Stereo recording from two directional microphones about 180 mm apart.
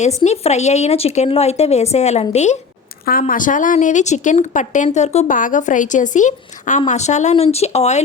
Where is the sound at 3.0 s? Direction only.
50° left (ahead or behind).